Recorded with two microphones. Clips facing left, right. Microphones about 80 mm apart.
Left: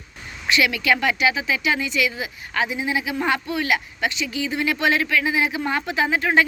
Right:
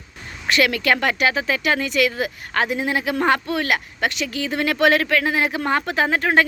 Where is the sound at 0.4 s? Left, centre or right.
Right.